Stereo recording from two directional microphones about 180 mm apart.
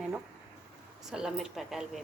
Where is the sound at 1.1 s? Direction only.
5° right (ahead or behind).